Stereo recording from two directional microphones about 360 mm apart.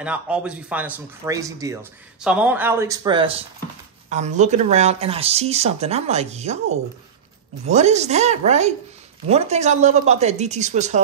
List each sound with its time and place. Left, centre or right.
0.0 s speech: centre